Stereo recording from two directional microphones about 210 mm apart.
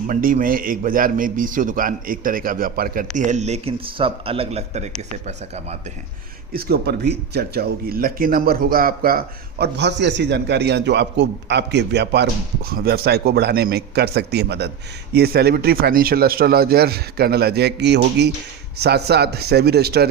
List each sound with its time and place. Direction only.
0.1 s a man's voice: 40° right (ahead or behind)
6.5 s speech: 45° right (ahead or behind)